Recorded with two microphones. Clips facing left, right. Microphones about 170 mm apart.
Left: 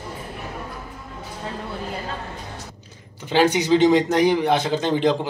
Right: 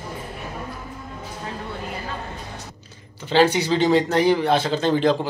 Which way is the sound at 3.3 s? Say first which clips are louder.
Left 1 dB; 15° left (ahead or behind).